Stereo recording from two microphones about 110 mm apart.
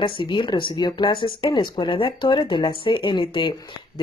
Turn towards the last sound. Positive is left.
turn(degrees=45)  # may be behind; listen again after turning